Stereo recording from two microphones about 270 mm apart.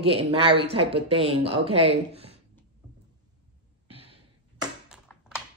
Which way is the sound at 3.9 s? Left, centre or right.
Right.